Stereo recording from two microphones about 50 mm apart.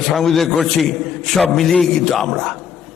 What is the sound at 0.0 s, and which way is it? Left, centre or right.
A man's voice, centre.